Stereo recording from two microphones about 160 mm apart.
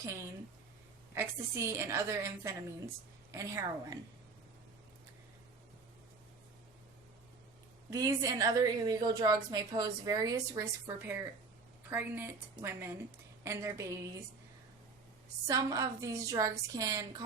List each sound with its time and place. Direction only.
0.0 s a woman's voice: 20° right (ahead or behind)
7.9 s a woman's voice: 20° right (ahead or behind)
15.4 s a woman's voice: 20° right (ahead or behind)